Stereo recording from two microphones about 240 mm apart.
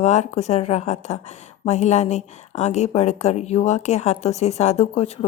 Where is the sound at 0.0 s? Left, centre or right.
Left.